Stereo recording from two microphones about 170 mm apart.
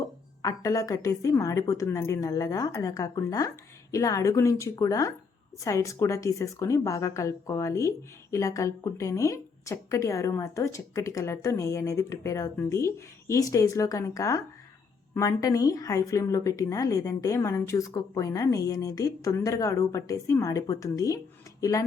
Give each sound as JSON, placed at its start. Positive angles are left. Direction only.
{"t": 0.4, "sound": "a woman's voice", "side_deg": 20}